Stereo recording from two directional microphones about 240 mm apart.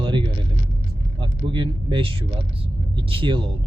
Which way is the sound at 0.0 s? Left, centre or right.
Right.